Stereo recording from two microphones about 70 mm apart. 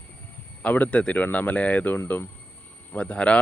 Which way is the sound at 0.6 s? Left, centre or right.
Left.